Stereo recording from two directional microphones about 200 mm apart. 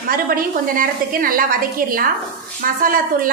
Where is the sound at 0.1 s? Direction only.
45° right (ahead or behind).